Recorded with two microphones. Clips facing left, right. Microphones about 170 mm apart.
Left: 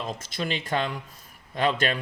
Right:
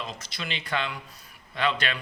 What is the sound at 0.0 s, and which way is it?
Speech, 50° left (ahead or behind).